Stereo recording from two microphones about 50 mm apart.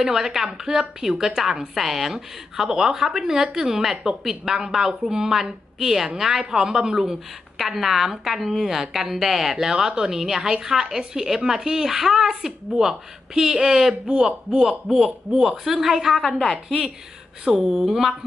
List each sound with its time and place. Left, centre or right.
0.0 s a woman's voice: centre
14.7 s a woman's voice: centre
16.2 s a woman's voice: centre
16.6 s a woman's voice: centre